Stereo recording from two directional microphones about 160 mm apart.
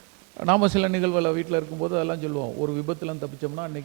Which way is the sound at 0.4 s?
20° right (ahead or behind).